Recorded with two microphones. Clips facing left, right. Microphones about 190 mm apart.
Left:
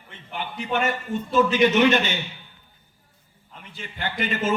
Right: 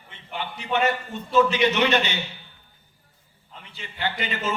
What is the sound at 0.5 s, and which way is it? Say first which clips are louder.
A woman's voice: right 1 dB; 50° left (ahead or behind).